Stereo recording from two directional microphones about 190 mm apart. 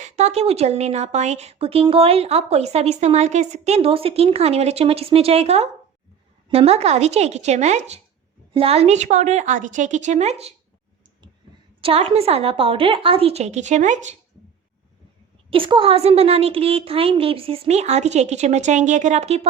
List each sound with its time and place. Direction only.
0.0 s a woman's voice: 35° right (ahead or behind)
11.8 s a woman's voice: 30° right (ahead or behind)
15.4 s a woman's voice: 30° right (ahead or behind)